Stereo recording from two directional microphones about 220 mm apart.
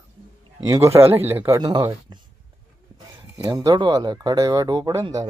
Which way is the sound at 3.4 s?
15° right (ahead or behind).